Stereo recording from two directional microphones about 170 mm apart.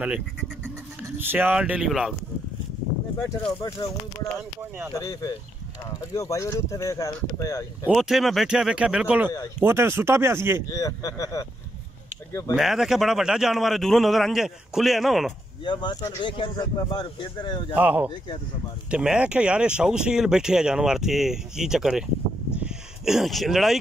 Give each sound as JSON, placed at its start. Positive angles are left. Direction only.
{"t": 1.0, "sound": "speech", "side_deg": -10}
{"t": 3.6, "sound": "speech", "side_deg": 20}
{"t": 4.4, "sound": "speech", "side_deg": -10}
{"t": 4.9, "sound": "speech", "side_deg": 20}
{"t": 7.8, "sound": "speech", "side_deg": 0}
{"t": 10.7, "sound": "speech", "side_deg": 20}
{"t": 12.5, "sound": "speech", "side_deg": 0}
{"t": 15.6, "sound": "speech", "side_deg": 25}
{"t": 17.7, "sound": "speech", "side_deg": -10}
{"t": 22.6, "sound": "a sound", "side_deg": -5}